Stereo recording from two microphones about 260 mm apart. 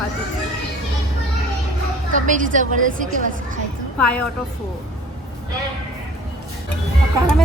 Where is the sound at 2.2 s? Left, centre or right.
Right.